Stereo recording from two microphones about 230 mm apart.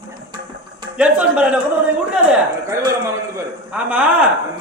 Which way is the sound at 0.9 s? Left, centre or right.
Centre.